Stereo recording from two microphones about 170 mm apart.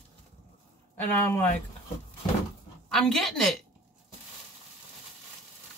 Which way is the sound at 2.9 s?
5° left (ahead or behind).